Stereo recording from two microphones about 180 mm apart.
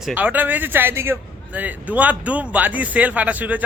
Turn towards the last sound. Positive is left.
turn(degrees=-10)  # may be behind; listen again after turning